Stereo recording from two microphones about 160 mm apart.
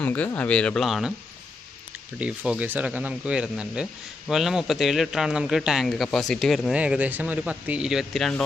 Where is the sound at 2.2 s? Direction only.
10° right (ahead or behind).